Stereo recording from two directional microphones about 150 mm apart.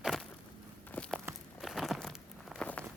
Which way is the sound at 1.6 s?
Centre (ahead or behind).